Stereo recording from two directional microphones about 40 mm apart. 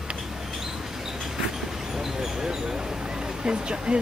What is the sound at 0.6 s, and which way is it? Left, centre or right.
Vehicle, centre.